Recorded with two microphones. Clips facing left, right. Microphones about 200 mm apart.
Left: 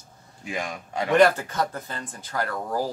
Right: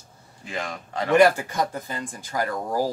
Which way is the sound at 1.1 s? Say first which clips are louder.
Right 1 dB; 10° right (ahead or behind).